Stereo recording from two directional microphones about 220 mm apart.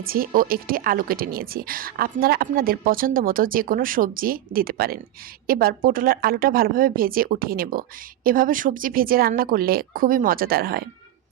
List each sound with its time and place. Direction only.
0.0 s a woman's voice: 40° right (ahead or behind)